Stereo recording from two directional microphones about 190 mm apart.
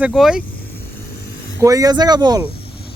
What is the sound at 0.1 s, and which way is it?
Speech, 5° right (ahead or behind).